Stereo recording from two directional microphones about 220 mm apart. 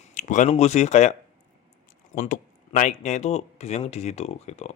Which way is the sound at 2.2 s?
35° left (ahead or behind).